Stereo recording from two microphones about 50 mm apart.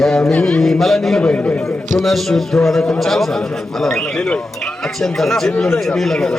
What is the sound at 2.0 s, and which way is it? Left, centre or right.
A man's voice, centre.